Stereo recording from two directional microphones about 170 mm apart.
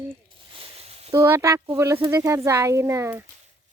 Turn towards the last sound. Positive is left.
turn(degrees=-15)  # may be behind; listen again after turning